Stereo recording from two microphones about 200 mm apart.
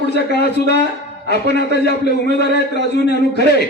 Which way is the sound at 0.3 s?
55° left (ahead or behind).